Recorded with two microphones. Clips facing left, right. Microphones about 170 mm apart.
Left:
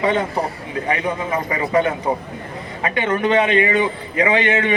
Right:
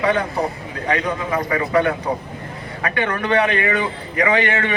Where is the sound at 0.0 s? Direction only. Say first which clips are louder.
Even; 25° left (ahead or behind).